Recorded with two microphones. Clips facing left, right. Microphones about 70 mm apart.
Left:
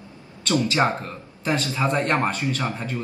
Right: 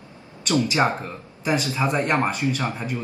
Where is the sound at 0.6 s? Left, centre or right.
Centre.